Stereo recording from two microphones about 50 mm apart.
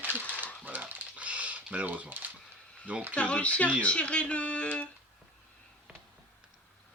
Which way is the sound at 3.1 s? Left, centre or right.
Left.